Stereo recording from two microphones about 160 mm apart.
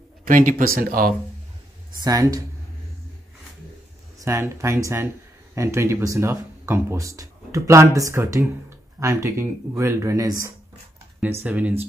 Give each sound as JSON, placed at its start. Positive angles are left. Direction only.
{"t": 0.2, "sound": "speech", "side_deg": -55}
{"t": 2.0, "sound": "speech", "side_deg": -20}
{"t": 4.2, "sound": "speech", "side_deg": -20}
{"t": 11.4, "sound": "speech", "side_deg": -10}